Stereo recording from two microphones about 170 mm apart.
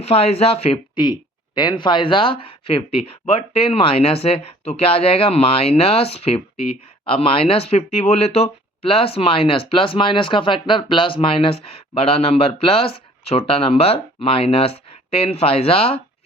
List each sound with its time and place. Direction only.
0.0 s speech: 35° left (ahead or behind)